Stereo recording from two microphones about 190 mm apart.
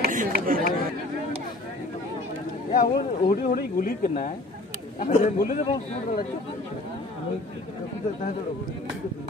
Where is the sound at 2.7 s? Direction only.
50° left (ahead or behind).